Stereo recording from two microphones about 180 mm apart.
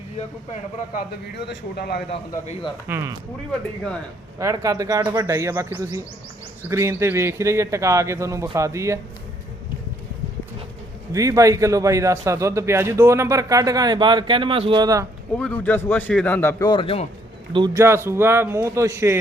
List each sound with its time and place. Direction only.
1.4 s a man's voice: 65° left (ahead or behind)
2.0 s a man's voice: 30° left (ahead or behind)
2.9 s a man's voice: 10° right (ahead or behind)
4.4 s a man's voice: 20° right (ahead or behind)
11.1 s a man's voice: 20° right (ahead or behind)
15.4 s speech: 10° left (ahead or behind); by 17.1 s 30° left (ahead or behind)
17.5 s a man's voice: 25° right (ahead or behind)
17.8 s a man's voice: 15° right (ahead or behind)